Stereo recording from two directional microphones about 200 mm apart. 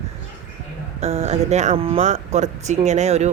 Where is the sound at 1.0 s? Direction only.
30° right (ahead or behind).